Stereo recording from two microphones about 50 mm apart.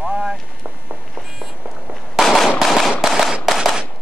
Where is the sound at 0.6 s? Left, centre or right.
Right.